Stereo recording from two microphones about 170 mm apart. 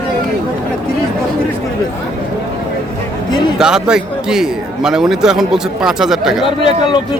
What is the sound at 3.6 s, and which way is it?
A man's voice, 5° right (ahead or behind).